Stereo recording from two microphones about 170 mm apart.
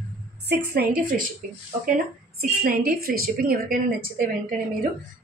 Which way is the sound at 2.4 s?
60° right (ahead or behind).